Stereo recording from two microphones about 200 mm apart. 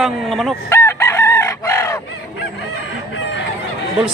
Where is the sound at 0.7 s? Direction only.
15° left (ahead or behind).